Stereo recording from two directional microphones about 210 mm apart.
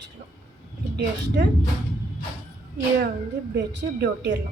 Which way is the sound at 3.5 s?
50° right (ahead or behind).